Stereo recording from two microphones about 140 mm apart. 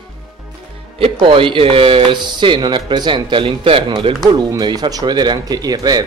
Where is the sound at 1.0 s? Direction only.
40° right (ahead or behind).